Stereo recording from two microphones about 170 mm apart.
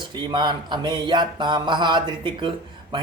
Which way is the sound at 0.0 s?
25° right (ahead or behind).